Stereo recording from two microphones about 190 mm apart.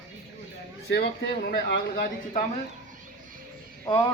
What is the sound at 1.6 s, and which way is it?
Speech, 65° left (ahead or behind).